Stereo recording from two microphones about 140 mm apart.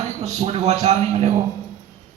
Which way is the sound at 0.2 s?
50° right (ahead or behind).